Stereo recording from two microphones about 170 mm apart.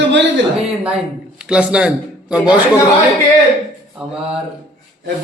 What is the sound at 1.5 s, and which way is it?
Speech, 5° right (ahead or behind).